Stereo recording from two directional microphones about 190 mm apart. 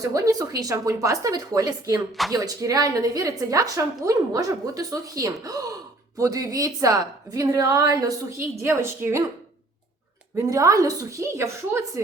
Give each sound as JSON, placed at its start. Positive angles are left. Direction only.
{"t": 0.0, "sound": "a woman's voice", "side_deg": -20}
{"t": 10.3, "sound": "a woman's voice", "side_deg": -15}